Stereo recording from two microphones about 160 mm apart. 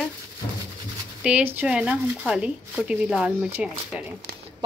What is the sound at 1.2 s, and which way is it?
Speech, 10° right (ahead or behind).